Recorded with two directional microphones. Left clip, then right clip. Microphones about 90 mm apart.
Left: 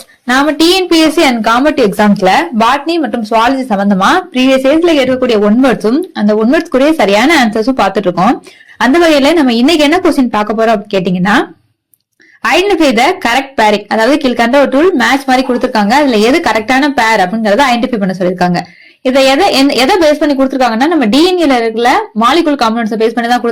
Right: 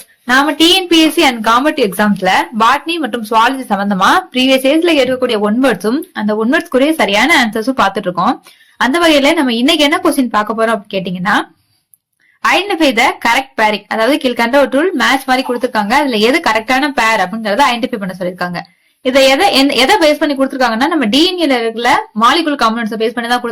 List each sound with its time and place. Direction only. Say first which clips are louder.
0.3 s a woman's voice: left 1 dB; 30° left (ahead or behind); by 3.7 s 10° left (ahead or behind)
4.0 s speech: even; centre (ahead or behind)
4.6 s speech: left 2 dB; 10° left (ahead or behind)
6.1 s a woman's voice: left 5 dB; 35° left (ahead or behind)
6.4 s speech: left 3 dB; 15° left (ahead or behind)
6.7 s a woman's voice: left 3 dB; 30° left (ahead or behind)
9.1 s speech: left 3 dB; 35° left (ahead or behind)